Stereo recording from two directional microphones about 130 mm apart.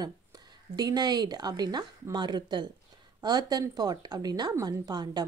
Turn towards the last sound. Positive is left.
turn(degrees=-30)  # may be behind; listen again after turning